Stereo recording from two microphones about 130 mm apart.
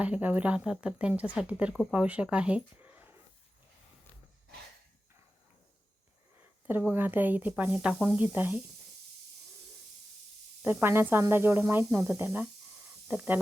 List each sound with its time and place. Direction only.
0.0 s speech: 10° right (ahead or behind)
6.9 s speech: 15° right (ahead or behind)
10.6 s speech: 15° right (ahead or behind)